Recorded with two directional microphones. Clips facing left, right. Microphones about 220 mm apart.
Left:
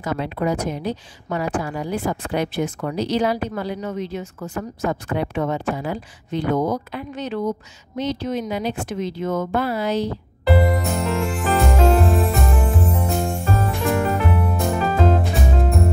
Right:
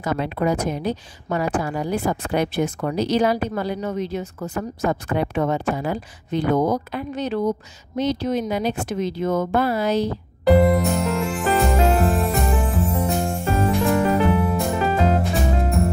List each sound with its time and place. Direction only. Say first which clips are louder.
0.0 s a woman's voice: right 1 dB; 50° right (ahead or behind)
10.6 s music: right 3 dB; centre (ahead or behind)